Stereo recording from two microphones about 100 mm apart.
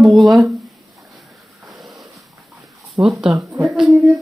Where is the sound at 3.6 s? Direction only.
5° right (ahead or behind).